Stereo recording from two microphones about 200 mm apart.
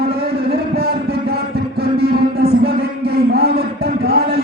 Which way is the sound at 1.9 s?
50° right (ahead or behind).